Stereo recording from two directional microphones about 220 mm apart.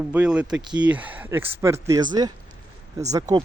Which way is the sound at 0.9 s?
5° right (ahead or behind).